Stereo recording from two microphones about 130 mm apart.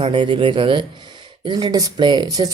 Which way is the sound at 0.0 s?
40° right (ahead or behind).